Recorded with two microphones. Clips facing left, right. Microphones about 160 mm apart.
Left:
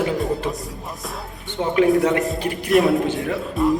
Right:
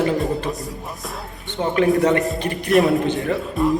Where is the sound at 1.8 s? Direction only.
Centre (ahead or behind).